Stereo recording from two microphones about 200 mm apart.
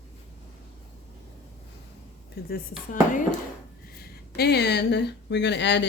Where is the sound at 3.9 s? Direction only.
55° left (ahead or behind).